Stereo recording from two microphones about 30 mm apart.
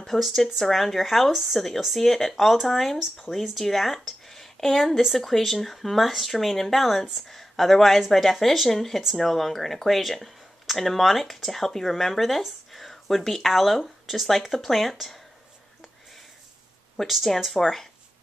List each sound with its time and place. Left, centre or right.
0.1 s speech: centre
16.9 s speech: centre